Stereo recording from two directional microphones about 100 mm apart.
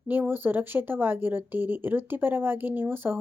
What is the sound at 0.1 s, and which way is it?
A woman's voice, 20° right (ahead or behind).